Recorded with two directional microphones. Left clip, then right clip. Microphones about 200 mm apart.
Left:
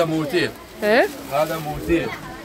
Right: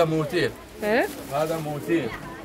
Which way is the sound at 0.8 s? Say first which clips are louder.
Left 6 dB; 30° left (ahead or behind).